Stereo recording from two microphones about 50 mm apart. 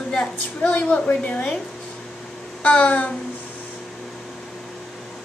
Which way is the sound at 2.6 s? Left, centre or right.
Left.